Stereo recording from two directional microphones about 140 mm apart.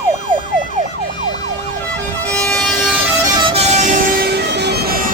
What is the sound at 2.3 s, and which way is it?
Vehicle, 5° left (ahead or behind).